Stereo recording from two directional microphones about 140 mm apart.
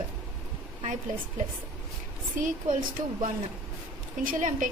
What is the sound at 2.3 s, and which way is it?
Speech, 65° right (ahead or behind).